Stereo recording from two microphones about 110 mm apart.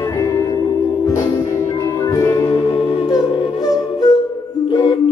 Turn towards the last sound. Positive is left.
turn(degrees=35)  # may be behind; listen again after turning